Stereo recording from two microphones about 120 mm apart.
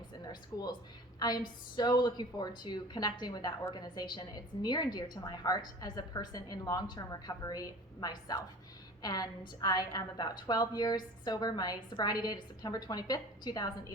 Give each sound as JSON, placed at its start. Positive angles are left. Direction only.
{"t": 0.3, "sound": "a woman's voice", "side_deg": 35}